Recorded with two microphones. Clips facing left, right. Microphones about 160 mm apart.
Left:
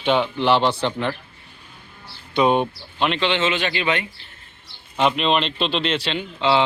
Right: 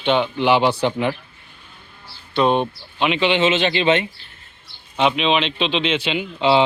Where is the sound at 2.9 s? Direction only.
5° right (ahead or behind); by 4.0 s 25° right (ahead or behind).